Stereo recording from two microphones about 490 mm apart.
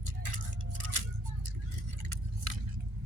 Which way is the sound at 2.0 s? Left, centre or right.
Right.